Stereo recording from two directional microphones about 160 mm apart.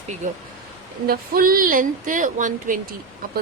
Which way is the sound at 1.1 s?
65° right (ahead or behind).